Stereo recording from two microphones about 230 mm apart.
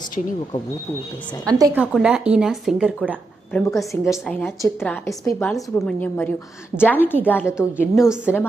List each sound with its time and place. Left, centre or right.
1.5 s a woman's voice: centre
5.5 s a woman's voice: centre
7.5 s speech: centre